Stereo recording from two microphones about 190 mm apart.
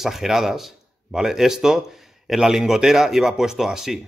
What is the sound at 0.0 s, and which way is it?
Speech, centre (ahead or behind).